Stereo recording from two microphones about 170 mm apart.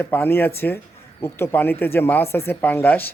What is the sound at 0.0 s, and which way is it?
A man's voice, 10° left (ahead or behind).